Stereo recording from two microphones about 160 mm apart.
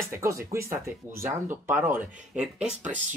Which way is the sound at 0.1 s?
20° right (ahead or behind).